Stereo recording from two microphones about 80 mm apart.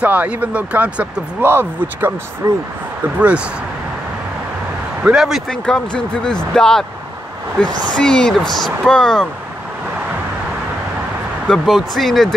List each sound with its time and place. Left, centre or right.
0.0 s speech: centre
1.4 s speech: right
3.2 s speech: centre
5.0 s speech: centre
5.5 s speech: centre
8.0 s speech: centre
11.4 s speech: centre